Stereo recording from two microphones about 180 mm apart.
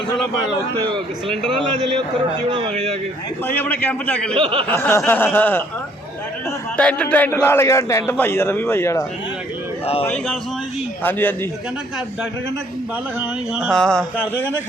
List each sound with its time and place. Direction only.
1.3 s a sound: centre (ahead or behind)
2.5 s speech: 30° right (ahead or behind)
3.4 s a man's voice: 10° left (ahead or behind)
4.4 s speech: 30° right (ahead or behind)
4.7 s a man's voice: 15° left (ahead or behind)
6.7 s a man's voice: 5° left (ahead or behind)
13.1 s a sound: 5° right (ahead or behind)